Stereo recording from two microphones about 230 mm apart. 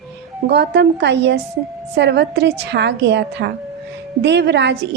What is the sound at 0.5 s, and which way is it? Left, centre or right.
A woman's voice, right.